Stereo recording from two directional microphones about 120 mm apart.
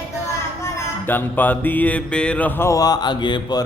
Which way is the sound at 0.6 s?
15° left (ahead or behind).